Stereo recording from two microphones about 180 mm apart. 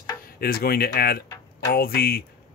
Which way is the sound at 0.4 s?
55° left (ahead or behind).